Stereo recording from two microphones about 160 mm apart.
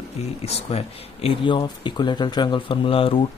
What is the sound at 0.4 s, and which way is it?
Speech, 40° left (ahead or behind).